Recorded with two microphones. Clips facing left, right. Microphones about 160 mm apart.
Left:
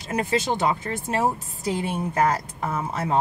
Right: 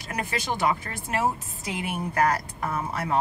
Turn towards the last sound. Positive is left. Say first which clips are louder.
# left 2 dB
turn(degrees=25)  # may be behind; listen again after turning